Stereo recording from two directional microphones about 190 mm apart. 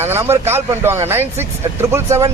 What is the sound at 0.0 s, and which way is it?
Speech, 15° right (ahead or behind).